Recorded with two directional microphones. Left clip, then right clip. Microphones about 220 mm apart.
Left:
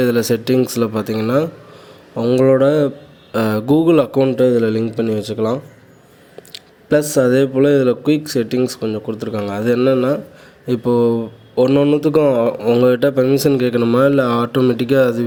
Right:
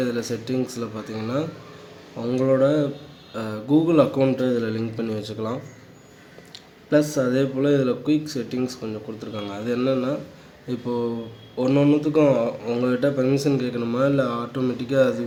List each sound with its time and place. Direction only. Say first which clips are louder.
0.0 s speech: left 10 dB; 40° left (ahead or behind)